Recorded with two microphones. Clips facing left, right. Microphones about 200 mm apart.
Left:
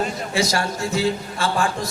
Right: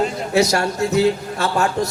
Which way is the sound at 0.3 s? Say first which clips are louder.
Right 6 dB; 65° right (ahead or behind).